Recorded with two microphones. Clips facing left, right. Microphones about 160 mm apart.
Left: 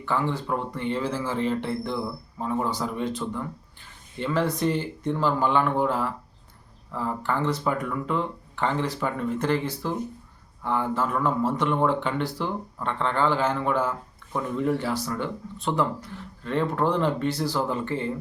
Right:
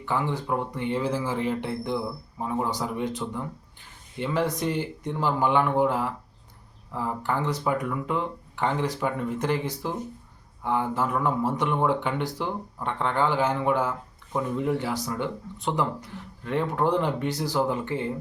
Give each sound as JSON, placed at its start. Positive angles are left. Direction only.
{"t": 0.0, "sound": "speech", "side_deg": -15}